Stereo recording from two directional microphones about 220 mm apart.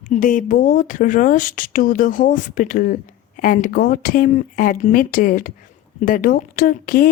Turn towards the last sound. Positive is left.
turn(degrees=40)  # may be behind; listen again after turning